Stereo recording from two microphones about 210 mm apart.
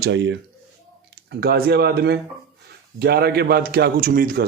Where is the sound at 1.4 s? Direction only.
50° right (ahead or behind).